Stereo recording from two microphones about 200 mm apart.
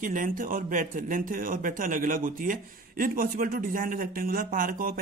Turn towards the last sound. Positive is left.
turn(degrees=-45)  # may be behind; listen again after turning